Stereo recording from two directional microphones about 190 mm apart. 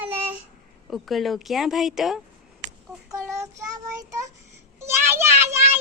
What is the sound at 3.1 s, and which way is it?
Speech, 15° right (ahead or behind).